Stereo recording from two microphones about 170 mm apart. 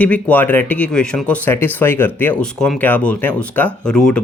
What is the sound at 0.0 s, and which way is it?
Speech, 10° left (ahead or behind).